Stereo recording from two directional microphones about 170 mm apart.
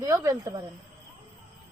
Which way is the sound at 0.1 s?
20° right (ahead or behind).